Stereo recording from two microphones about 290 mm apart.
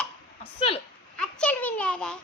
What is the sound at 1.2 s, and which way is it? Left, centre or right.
A child's voice, centre.